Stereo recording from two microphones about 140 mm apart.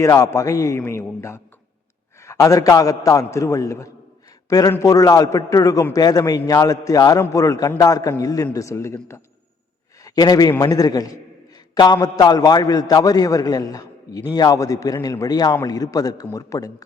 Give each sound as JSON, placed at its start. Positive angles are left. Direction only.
{"t": 0.0, "sound": "a man's voice", "side_deg": 20}